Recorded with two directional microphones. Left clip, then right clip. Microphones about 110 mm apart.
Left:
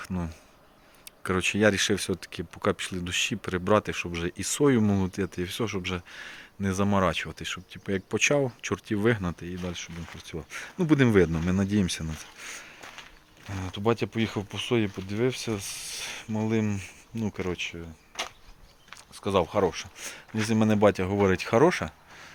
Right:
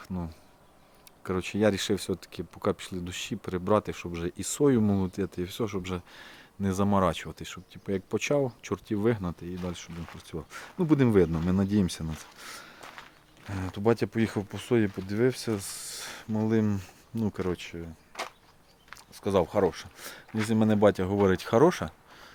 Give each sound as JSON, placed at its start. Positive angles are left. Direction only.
{"t": 0.1, "sound": "speech", "side_deg": 0}
{"t": 7.3, "sound": "speech", "side_deg": -20}
{"t": 10.3, "sound": "speech", "side_deg": -25}
{"t": 10.8, "sound": "speech", "side_deg": -10}
{"t": 11.4, "sound": "speech", "side_deg": -25}
{"t": 12.4, "sound": "speech", "side_deg": -45}
{"t": 13.6, "sound": "speech", "side_deg": -55}
{"t": 19.1, "sound": "speech", "side_deg": -40}
{"t": 20.3, "sound": "speech", "side_deg": -25}